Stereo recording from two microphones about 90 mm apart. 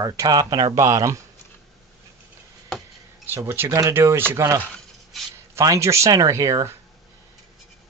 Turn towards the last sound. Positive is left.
turn(degrees=-35)  # may be behind; listen again after turning